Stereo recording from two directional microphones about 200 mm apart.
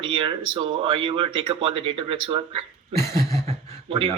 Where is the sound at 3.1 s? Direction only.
15° left (ahead or behind).